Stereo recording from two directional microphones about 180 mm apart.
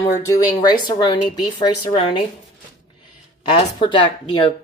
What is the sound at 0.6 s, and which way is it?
A woman's voice, 20° left (ahead or behind).